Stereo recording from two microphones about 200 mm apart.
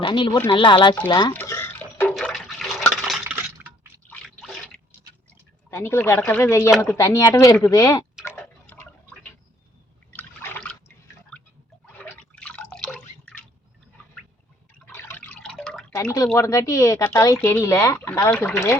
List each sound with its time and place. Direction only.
0.0 s speech: 25° left (ahead or behind)
1.3 s water: 10° left (ahead or behind)
2.9 s a sound: centre (ahead or behind)
4.1 s drip: centre (ahead or behind)
5.7 s speech: 10° left (ahead or behind)
8.6 s drip: 10° left (ahead or behind)
10.2 s liquid: 10° left (ahead or behind)
11.3 s a sound: 5° left (ahead or behind)
11.9 s drip: 5° left (ahead or behind)
14.8 s liquid: 10° left (ahead or behind)
16.0 s speech: 15° left (ahead or behind)